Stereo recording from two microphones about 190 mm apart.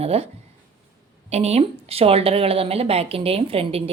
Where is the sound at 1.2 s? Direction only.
35° right (ahead or behind).